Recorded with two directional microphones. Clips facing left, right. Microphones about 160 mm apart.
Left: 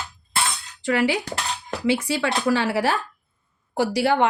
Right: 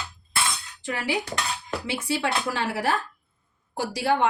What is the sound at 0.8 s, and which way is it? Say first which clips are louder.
Cutlery: left 8 dB; 85° left.